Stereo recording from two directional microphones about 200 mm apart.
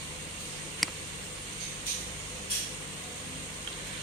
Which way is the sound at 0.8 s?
Centre (ahead or behind).